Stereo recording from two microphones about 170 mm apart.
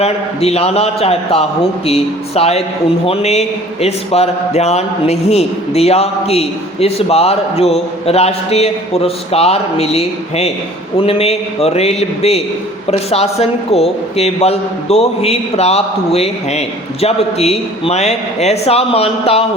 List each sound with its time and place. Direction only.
0.0 s a man's voice: 40° left (ahead or behind)